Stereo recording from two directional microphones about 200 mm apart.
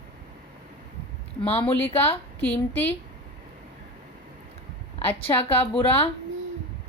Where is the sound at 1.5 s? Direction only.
30° left (ahead or behind).